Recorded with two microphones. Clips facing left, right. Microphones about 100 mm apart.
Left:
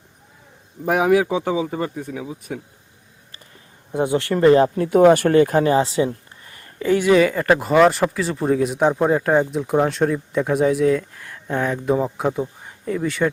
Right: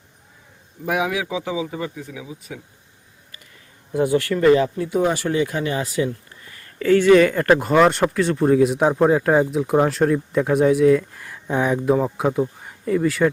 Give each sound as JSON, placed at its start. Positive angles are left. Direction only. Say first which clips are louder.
{"t": 0.9, "sound": "speech", "louder": "left 6 dB", "side_deg": 40}
{"t": 3.9, "sound": "speech", "louder": "right 1 dB", "side_deg": 25}
{"t": 4.4, "sound": "speech", "louder": "left 3 dB", "side_deg": 40}
{"t": 4.7, "sound": "speech", "louder": "left 7 dB", "side_deg": 60}
{"t": 5.7, "sound": "speech", "louder": "left 5 dB", "side_deg": 25}
{"t": 6.7, "sound": "speech", "louder": "right 2 dB", "side_deg": 15}
{"t": 11.9, "sound": "speech", "louder": "right 1 dB", "side_deg": 0}